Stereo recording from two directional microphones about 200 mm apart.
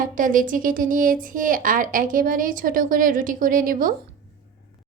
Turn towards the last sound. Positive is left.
turn(degrees=-45)  # may be behind; listen again after turning